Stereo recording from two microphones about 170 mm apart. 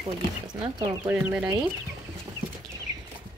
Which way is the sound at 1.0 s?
10° right (ahead or behind).